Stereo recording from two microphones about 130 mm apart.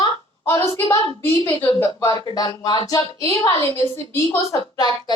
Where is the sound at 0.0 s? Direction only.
20° left (ahead or behind).